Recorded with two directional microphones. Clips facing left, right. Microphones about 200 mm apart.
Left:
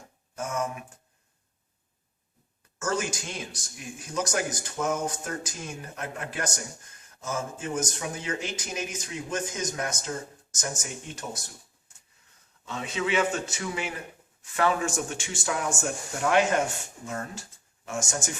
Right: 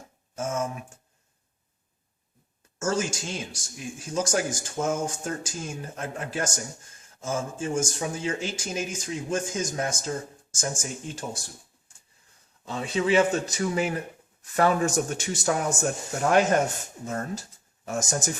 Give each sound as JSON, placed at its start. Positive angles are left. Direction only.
{"t": 0.3, "sound": "speech", "side_deg": -25}
{"t": 2.7, "sound": "speech", "side_deg": -25}
{"t": 12.6, "sound": "speech", "side_deg": -35}